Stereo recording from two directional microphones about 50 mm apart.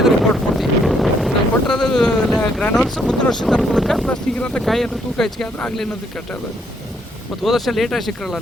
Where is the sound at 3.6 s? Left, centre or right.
Centre.